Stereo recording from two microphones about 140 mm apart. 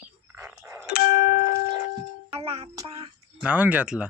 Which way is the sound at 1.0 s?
85° left.